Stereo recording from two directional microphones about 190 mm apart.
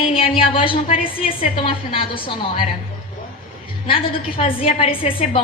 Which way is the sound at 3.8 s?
30° left (ahead or behind).